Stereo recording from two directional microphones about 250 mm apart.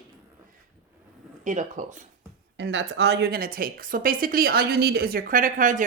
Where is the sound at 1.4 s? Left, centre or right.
Right.